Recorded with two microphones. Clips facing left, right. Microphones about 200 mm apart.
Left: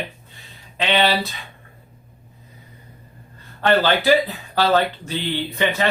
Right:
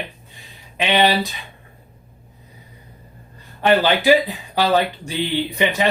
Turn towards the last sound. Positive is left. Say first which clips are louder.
# right 2 dB
turn(degrees=-15)  # may be behind; listen again after turning